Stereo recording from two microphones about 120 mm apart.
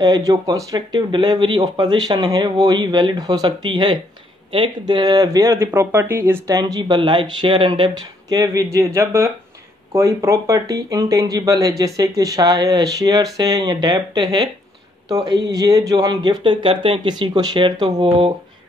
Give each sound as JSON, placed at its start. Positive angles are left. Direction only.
{"t": 0.0, "sound": "speech", "side_deg": -30}
{"t": 6.5, "sound": "speech", "side_deg": -30}
{"t": 18.0, "sound": "speech", "side_deg": -50}